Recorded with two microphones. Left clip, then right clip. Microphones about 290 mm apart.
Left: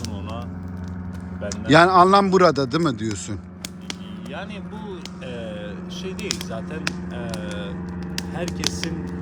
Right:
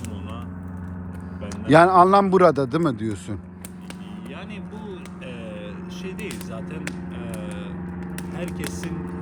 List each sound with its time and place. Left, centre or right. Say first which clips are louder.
1.5 s a man's voice: even; centre
6.5 s vehicle: left 4 dB; centre